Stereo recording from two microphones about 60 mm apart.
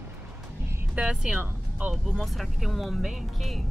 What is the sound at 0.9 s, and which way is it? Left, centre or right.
Speech, centre.